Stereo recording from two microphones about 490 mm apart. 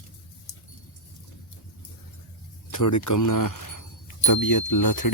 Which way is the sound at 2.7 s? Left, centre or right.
Left.